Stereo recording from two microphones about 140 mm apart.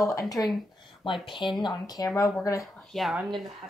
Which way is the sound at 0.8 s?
35° left (ahead or behind).